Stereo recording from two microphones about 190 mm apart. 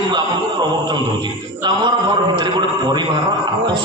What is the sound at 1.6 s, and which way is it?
A man's voice, 20° right (ahead or behind).